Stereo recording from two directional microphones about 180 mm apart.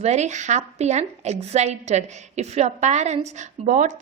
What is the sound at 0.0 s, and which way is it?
A woman's voice, 40° right (ahead or behind).